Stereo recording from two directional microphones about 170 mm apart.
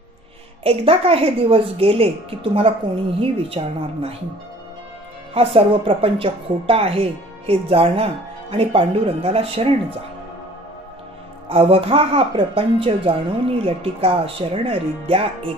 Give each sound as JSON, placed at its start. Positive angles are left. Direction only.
{"t": 0.7, "sound": "a woman's voice", "side_deg": -35}
{"t": 5.3, "sound": "a woman's voice", "side_deg": -35}
{"t": 11.4, "sound": "a woman's voice", "side_deg": -35}